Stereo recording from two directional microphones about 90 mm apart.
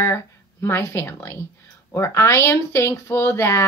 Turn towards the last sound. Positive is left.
turn(degrees=30)  # may be behind; listen again after turning